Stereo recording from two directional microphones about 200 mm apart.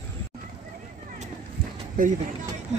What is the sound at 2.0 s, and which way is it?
Speech, 45° right (ahead or behind).